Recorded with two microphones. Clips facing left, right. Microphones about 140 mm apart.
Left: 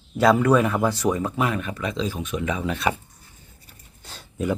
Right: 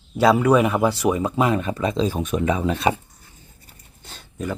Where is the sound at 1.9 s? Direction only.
40° right (ahead or behind).